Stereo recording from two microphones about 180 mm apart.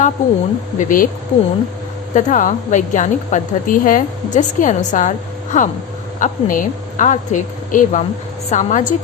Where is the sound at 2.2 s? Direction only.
45° left (ahead or behind).